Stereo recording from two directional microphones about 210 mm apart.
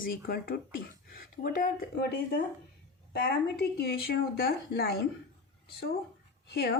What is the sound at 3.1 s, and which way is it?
A woman's voice, 50° left (ahead or behind).